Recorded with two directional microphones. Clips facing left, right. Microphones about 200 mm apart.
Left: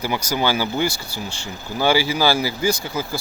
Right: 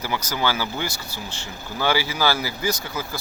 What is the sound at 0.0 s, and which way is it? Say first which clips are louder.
Speech: left 3 dB; 10° left (ahead or behind).